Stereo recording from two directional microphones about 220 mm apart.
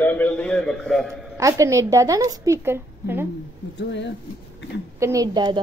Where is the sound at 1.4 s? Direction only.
15° right (ahead or behind).